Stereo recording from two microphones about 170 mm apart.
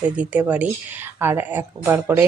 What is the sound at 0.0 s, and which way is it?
Speech, 10° right (ahead or behind).